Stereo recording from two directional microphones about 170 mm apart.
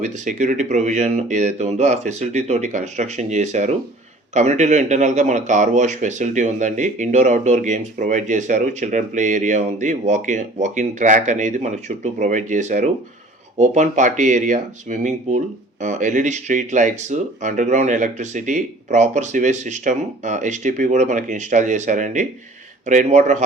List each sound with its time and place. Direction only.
0.0 s speech: 45° right (ahead or behind)